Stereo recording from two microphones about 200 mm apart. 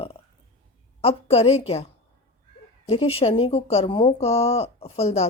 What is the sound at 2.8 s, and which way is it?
Speech, 30° left (ahead or behind).